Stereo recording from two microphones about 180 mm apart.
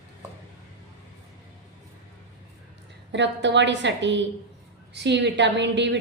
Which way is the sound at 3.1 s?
80° right.